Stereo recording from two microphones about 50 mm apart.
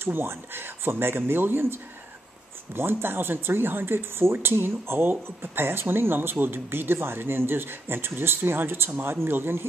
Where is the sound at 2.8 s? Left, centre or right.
Right.